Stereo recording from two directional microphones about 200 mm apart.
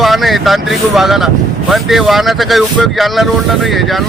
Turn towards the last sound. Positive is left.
turn(degrees=0)  # may be behind; listen again after turning